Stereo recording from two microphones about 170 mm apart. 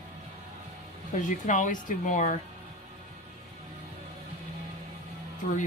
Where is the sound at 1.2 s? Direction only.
50° left (ahead or behind).